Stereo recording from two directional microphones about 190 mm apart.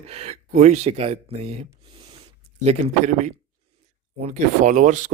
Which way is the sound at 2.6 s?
35° right (ahead or behind).